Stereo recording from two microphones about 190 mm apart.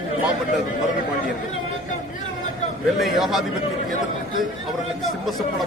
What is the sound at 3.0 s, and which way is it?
Speech, centre (ahead or behind).